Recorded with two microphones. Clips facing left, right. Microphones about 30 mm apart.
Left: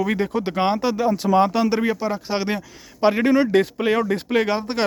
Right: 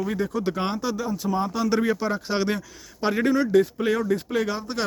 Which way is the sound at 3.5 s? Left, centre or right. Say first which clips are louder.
Left 1 dB; left.